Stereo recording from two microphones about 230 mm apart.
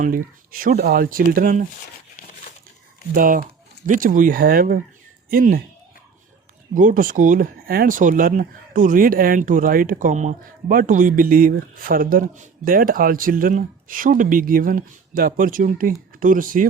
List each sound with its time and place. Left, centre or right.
0.0 s speech: right
3.2 s speech: right
6.7 s speech: right